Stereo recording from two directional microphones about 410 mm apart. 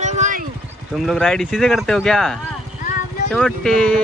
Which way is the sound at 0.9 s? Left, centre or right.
Centre.